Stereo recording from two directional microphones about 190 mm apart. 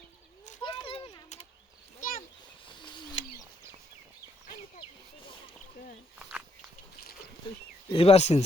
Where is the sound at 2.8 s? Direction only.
25° left (ahead or behind).